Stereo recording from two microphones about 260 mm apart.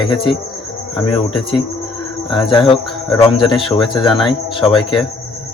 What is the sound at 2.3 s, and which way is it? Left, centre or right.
Speech, centre.